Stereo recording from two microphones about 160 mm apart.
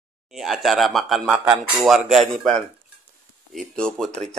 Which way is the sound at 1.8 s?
Centre (ahead or behind).